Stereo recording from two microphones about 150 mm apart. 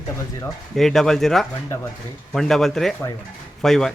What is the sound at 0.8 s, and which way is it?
Speech, centre (ahead or behind).